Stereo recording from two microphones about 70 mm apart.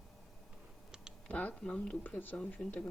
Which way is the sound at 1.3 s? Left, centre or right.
Left.